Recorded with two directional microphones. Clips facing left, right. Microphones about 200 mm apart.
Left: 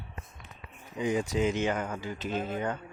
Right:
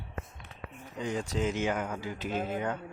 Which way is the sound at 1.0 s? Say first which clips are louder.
Left 4 dB; 15° left (ahead or behind).